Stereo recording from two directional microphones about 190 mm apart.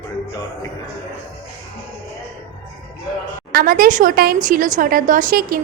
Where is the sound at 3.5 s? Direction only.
50° right (ahead or behind).